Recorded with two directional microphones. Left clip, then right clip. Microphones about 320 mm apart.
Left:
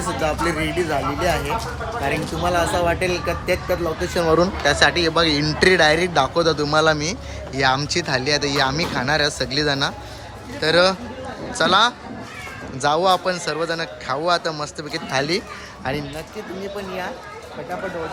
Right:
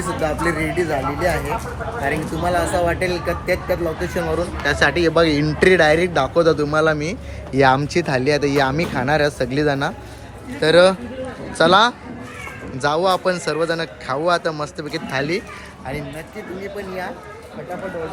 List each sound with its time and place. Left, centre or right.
0.2 s speech: centre